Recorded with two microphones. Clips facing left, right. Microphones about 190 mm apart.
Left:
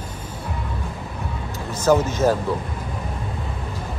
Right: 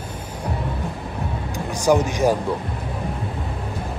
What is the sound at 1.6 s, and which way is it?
Speech, 15° right (ahead or behind).